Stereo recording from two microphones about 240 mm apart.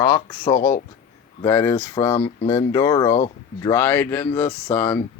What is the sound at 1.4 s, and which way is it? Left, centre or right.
Speech, centre.